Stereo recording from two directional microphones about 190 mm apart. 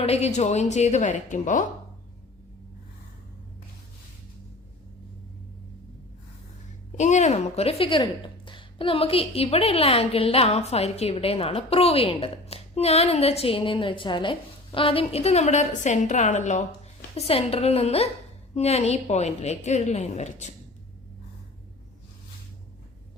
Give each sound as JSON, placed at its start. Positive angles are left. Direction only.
{"t": 0.0, "sound": "a woman's voice", "side_deg": 35}
{"t": 6.9, "sound": "a woman's voice", "side_deg": 40}